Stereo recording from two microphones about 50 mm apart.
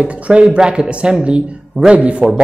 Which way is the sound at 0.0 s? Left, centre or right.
Right.